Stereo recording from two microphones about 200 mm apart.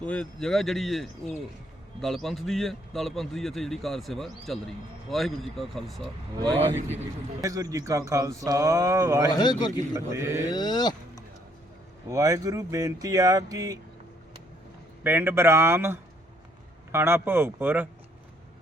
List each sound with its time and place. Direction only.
0.0 s a man's voice: 5° left (ahead or behind)
7.4 s speech: 15° right (ahead or behind)
9.3 s a man's voice: 20° left (ahead or behind)
9.9 s speech: 15° right (ahead or behind)
10.5 s speech: 20° left (ahead or behind)
12.0 s speech: 20° right (ahead or behind)
15.0 s speech: 10° right (ahead or behind)